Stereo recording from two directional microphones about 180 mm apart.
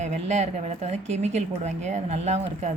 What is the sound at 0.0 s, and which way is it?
Speech, 40° right (ahead or behind).